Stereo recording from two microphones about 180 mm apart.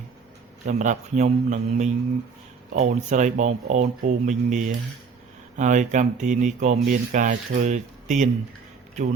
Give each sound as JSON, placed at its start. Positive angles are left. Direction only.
{"t": 0.6, "sound": "a man's voice", "side_deg": -45}